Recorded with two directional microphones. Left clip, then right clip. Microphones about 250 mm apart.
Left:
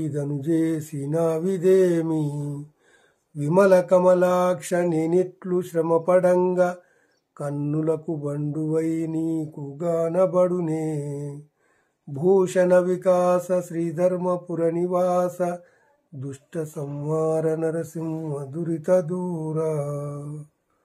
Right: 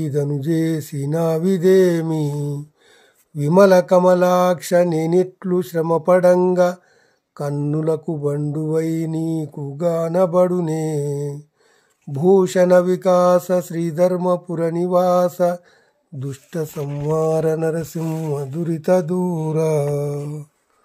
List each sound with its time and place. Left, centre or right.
0.0 s speech: right
3.3 s speech: right